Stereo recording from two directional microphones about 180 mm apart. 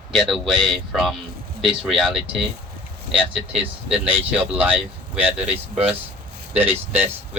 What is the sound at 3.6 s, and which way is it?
Speech, 35° right (ahead or behind).